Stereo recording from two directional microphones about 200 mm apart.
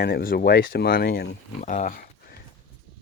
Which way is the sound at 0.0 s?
50° left (ahead or behind).